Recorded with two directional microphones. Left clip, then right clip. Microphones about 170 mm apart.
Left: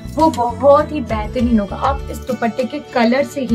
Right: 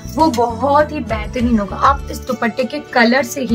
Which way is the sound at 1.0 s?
5° left (ahead or behind).